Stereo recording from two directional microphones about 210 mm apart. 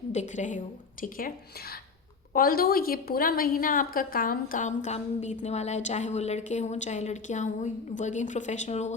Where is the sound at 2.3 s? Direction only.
45° left (ahead or behind).